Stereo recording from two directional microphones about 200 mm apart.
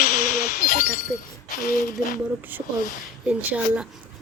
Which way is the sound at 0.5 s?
45° left (ahead or behind).